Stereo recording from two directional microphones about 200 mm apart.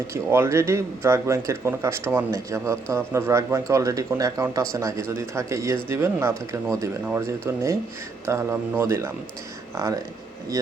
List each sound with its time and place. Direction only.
0.1 s speech: 10° right (ahead or behind)